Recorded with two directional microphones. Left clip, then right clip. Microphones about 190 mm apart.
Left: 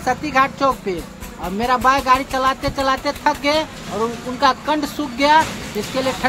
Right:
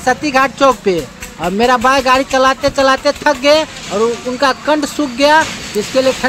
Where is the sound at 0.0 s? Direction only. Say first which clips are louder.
Right 5 dB; 30° right (ahead or behind).